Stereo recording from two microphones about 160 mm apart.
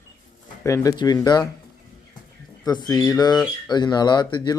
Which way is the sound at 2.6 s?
25° left (ahead or behind).